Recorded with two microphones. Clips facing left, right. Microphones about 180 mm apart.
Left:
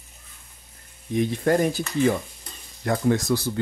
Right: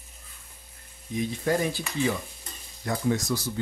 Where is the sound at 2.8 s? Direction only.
60° left (ahead or behind).